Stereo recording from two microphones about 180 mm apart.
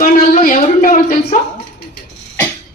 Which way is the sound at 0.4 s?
50° left (ahead or behind).